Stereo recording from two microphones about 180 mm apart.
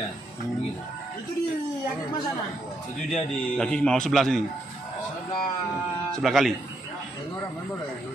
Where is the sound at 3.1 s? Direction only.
5° left (ahead or behind).